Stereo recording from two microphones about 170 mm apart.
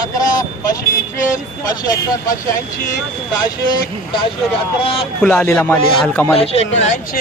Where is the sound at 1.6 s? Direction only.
20° left (ahead or behind).